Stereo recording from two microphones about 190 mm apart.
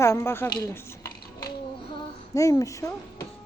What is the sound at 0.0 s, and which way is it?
A woman's voice, 15° left (ahead or behind).